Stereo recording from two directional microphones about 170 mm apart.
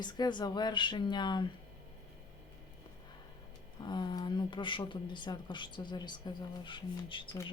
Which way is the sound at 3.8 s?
25° left (ahead or behind).